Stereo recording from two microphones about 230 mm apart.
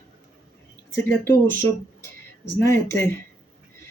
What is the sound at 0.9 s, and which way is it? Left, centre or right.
Speech, centre.